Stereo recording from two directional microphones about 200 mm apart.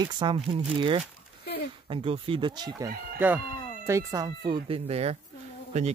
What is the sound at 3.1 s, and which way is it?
A man's voice, 10° right (ahead or behind).